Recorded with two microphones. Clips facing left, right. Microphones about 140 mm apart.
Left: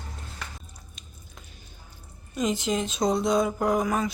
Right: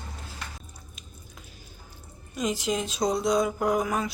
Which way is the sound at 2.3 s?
Centre (ahead or behind).